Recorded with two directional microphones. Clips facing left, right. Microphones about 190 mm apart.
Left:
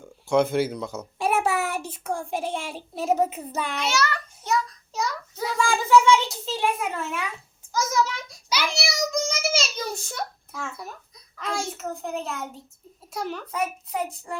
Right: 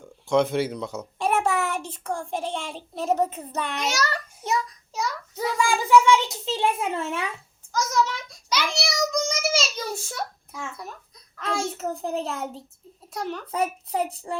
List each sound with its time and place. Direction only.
0.0 s a child's voice: 5° left (ahead or behind)
3.8 s a child's voice: 40° right (ahead or behind)
5.5 s a child's voice: 15° right (ahead or behind); by 7.3 s 30° right (ahead or behind)
7.7 s child singing: 5° left (ahead or behind)
11.3 s a child's voice: centre (ahead or behind)
11.8 s a child's voice: 35° right (ahead or behind)
13.1 s a child's voice: centre (ahead or behind)
13.5 s a child's voice: 30° right (ahead or behind)